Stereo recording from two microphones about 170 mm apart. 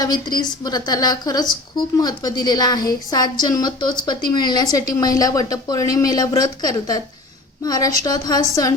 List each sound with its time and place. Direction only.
0.0 s a woman's voice: 25° left (ahead or behind)